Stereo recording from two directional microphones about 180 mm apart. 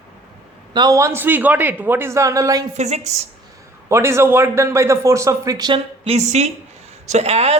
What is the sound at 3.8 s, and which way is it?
A man's voice, 15° right (ahead or behind).